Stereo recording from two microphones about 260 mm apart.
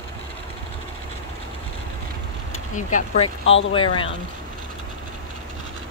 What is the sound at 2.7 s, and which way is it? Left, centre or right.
Speech, left.